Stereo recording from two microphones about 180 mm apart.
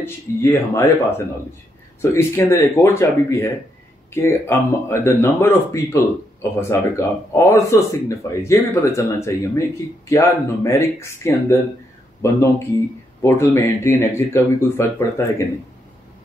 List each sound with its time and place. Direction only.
0.0 s speech: 15° left (ahead or behind)